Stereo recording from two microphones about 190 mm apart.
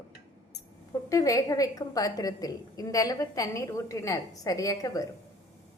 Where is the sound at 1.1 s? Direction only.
15° left (ahead or behind).